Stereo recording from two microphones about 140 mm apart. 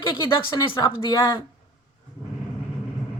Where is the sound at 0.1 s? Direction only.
35° left (ahead or behind).